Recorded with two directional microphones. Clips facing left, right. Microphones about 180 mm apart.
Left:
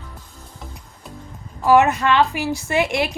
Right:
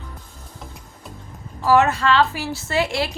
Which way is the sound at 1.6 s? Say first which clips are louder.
Left 2 dB; 15° left (ahead or behind).